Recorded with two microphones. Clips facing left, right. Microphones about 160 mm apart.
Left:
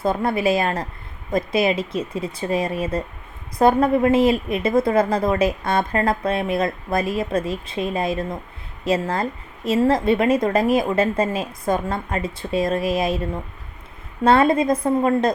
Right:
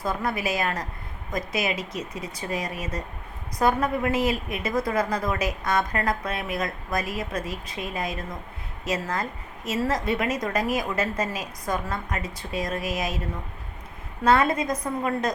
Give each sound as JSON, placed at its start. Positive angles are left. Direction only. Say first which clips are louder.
{"t": 0.0, "sound": "speech", "louder": "left 7 dB", "side_deg": 25}
{"t": 14.3, "sound": "speech", "louder": "left 6 dB", "side_deg": 30}